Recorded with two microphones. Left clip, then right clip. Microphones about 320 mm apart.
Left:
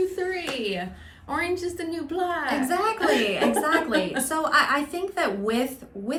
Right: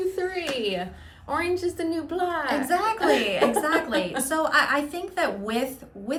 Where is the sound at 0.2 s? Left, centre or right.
Centre.